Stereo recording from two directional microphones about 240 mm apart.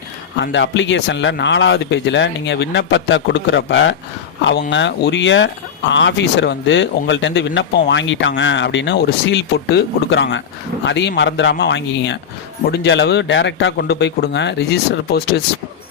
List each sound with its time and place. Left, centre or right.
0.3 s speech: left